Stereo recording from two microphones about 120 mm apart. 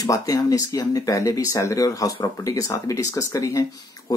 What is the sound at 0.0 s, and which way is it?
Speech, 30° left (ahead or behind).